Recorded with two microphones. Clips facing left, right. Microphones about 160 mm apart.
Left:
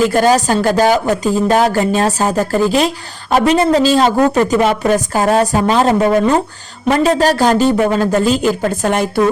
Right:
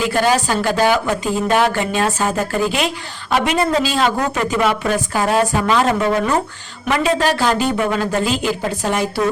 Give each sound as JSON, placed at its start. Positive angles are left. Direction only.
{"t": 0.0, "sound": "speech", "side_deg": 45}